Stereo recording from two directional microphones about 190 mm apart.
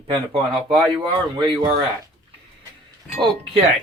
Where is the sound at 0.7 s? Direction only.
25° right (ahead or behind).